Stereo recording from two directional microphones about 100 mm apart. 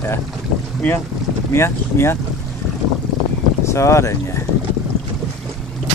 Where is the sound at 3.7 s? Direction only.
30° left (ahead or behind).